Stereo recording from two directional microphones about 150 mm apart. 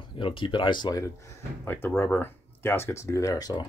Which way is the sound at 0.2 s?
35° left (ahead or behind).